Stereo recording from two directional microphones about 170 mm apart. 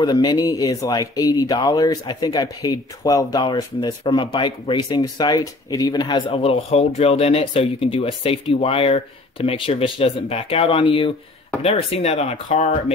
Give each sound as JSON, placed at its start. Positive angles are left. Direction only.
{"t": 0.0, "sound": "speech", "side_deg": 25}